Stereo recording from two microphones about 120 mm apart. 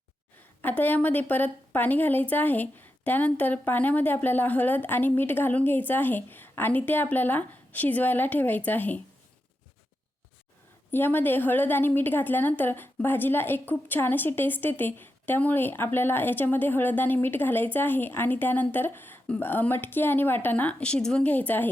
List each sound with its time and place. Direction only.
0.6 s a woman's voice: 15° left (ahead or behind)
10.9 s a woman's voice: 15° left (ahead or behind)